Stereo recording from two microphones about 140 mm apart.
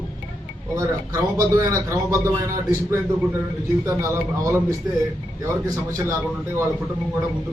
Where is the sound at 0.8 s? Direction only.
20° right (ahead or behind).